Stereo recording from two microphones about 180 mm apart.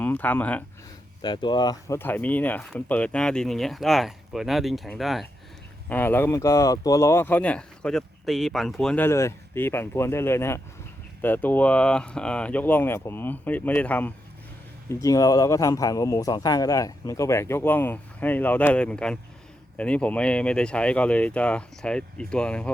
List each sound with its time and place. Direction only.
0.0 s speech: 10° left (ahead or behind)
1.2 s speech: 25° left (ahead or behind); by 5.2 s centre (ahead or behind)
5.9 s speech: 10° left (ahead or behind)